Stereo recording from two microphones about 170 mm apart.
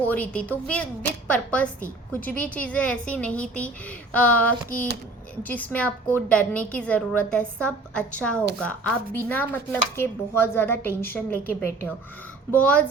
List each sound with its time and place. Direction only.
0.0 s a woman's voice: 10° left (ahead or behind)
12.5 s a woman's voice: 5° left (ahead or behind)